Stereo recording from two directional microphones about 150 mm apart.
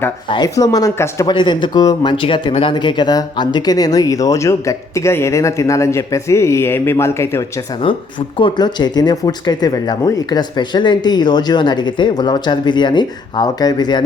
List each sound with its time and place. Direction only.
0.3 s speech: 25° left (ahead or behind)
1.3 s speech: 30° left (ahead or behind)
7.9 s speech: 35° left (ahead or behind)